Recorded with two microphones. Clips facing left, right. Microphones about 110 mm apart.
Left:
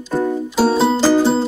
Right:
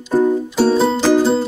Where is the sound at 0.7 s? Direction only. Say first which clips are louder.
Right 1 dB; 5° left (ahead or behind).